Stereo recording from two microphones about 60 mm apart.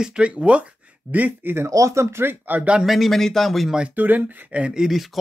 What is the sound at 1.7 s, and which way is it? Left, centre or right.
Speech, right.